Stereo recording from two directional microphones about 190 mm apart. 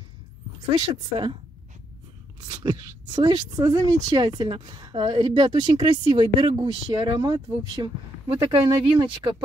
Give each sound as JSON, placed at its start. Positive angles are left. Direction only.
{"t": 0.7, "sound": "speech", "side_deg": -25}
{"t": 2.4, "sound": "speech", "side_deg": -20}